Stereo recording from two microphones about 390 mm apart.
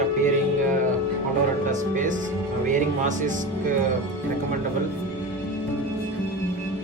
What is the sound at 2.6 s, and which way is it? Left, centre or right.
Speech, centre.